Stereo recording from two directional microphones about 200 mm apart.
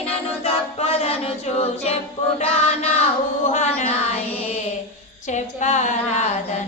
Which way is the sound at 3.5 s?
35° left (ahead or behind).